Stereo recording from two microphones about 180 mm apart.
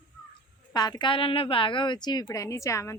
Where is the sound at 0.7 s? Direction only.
25° left (ahead or behind).